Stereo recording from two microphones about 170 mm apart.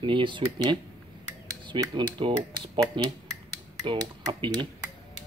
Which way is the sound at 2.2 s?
30° right (ahead or behind).